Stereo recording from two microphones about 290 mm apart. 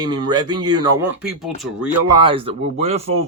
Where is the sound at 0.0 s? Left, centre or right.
Centre.